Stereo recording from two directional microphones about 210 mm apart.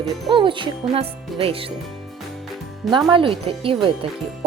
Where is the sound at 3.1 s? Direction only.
25° right (ahead or behind).